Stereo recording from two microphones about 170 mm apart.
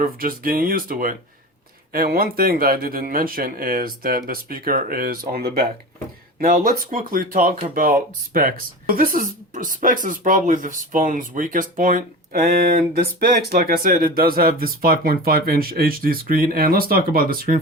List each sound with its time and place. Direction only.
0.0 s speech: 55° right (ahead or behind)